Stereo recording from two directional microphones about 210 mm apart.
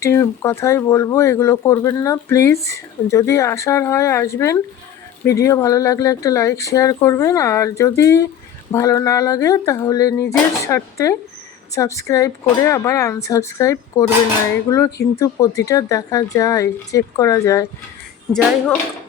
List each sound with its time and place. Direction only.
0.0 s speech: 15° left (ahead or behind)
18.3 s speech: 5° left (ahead or behind)